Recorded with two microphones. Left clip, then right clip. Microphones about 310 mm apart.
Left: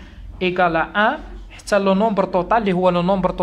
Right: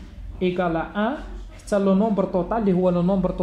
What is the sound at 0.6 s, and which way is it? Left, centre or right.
Speech, left.